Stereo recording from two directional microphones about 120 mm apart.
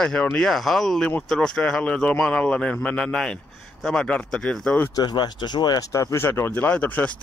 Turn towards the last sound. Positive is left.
turn(degrees=10)  # may be behind; listen again after turning